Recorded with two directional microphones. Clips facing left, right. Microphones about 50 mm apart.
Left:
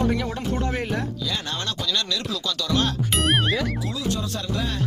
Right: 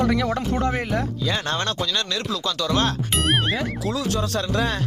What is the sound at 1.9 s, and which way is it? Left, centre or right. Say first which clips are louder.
Speech: right 1 dB; right.